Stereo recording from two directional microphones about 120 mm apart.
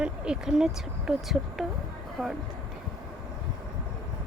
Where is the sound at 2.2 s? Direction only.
Centre (ahead or behind).